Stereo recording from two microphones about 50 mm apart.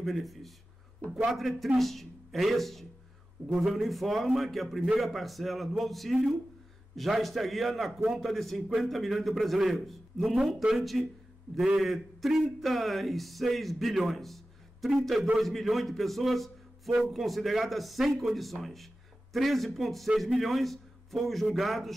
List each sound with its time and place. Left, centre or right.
0.0 s a man's voice: centre